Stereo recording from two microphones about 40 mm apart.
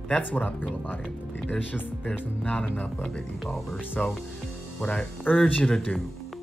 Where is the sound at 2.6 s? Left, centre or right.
Left.